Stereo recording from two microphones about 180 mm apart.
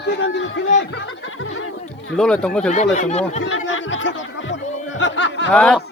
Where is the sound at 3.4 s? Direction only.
90° left.